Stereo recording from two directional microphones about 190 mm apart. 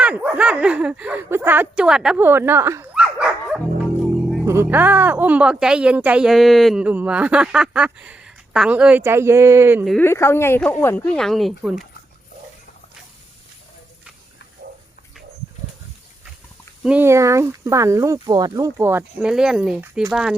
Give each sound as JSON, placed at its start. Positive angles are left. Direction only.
{"t": 0.0, "sound": "speech", "side_deg": -5}
{"t": 10.0, "sound": "speech", "side_deg": 15}
{"t": 16.8, "sound": "speech", "side_deg": -10}